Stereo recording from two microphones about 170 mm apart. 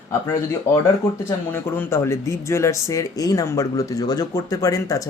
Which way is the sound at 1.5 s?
15° left (ahead or behind).